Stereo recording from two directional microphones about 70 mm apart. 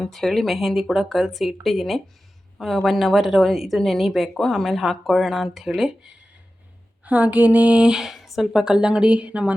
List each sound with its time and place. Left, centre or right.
0.0 s a woman's voice: centre
7.0 s a woman's voice: right